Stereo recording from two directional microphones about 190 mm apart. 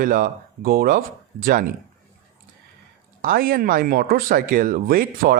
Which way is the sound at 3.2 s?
50° right (ahead or behind).